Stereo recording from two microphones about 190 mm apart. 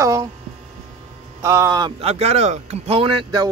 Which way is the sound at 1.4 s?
15° right (ahead or behind).